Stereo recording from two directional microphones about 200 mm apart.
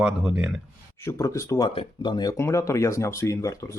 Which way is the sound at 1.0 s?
15° left (ahead or behind).